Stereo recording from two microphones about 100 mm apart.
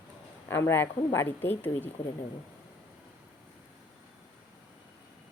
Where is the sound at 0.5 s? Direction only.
25° left (ahead or behind).